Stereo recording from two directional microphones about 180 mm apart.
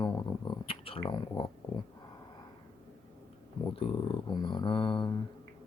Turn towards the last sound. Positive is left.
turn(degrees=25)  # may be behind; listen again after turning